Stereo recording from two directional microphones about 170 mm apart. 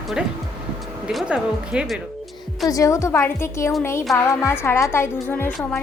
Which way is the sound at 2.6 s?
20° left (ahead or behind).